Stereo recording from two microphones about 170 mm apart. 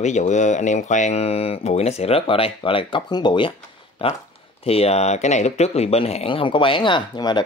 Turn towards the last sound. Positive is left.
turn(degrees=25)  # may be behind; listen again after turning